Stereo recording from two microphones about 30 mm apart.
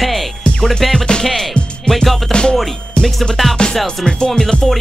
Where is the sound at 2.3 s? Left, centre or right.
Left.